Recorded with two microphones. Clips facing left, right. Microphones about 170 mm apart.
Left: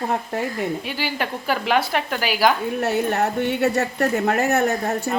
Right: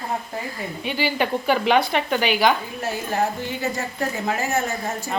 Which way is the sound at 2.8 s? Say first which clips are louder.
Left 4 dB; 65° left (ahead or behind).